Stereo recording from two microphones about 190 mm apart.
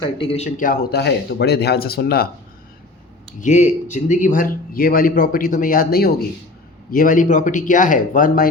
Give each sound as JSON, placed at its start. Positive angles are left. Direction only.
{"t": 0.0, "sound": "a man's voice", "side_deg": 30}
{"t": 3.4, "sound": "a man's voice", "side_deg": 40}